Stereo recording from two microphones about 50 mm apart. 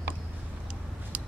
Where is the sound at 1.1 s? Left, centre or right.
Right.